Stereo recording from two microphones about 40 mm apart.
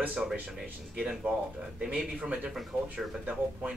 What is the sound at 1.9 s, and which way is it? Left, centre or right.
Speech, right.